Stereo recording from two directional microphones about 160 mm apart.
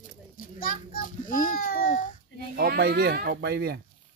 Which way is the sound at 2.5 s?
75° right (ahead or behind).